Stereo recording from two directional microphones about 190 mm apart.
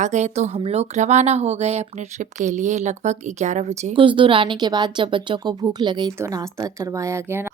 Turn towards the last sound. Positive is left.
turn(degrees=-15)  # may be behind; listen again after turning